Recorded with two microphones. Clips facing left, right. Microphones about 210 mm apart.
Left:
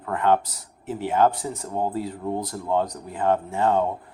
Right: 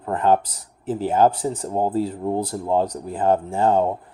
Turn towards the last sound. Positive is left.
turn(degrees=-35)  # may be behind; listen again after turning